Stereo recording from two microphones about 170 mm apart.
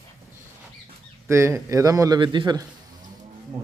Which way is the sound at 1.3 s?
15° right (ahead or behind).